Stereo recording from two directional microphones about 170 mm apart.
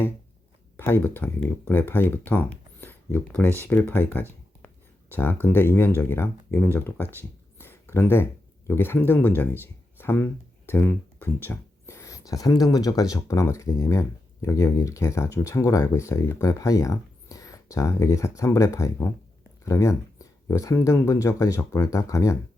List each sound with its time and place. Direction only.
0.8 s speech: 10° left (ahead or behind)